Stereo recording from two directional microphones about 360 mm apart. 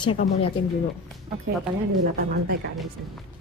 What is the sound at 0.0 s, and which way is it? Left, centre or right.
Speech, centre.